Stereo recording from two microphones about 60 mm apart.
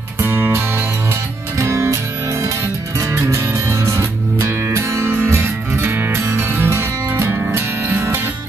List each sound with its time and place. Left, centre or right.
0.2 s music: right
1.6 s music: right
3.0 s music: right